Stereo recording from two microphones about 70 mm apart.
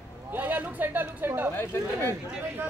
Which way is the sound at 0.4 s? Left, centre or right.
Right.